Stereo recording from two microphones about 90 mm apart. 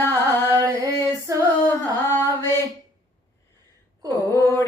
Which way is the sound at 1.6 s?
25° left (ahead or behind).